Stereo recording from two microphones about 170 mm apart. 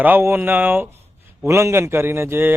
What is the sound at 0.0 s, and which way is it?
Speech, 10° right (ahead or behind).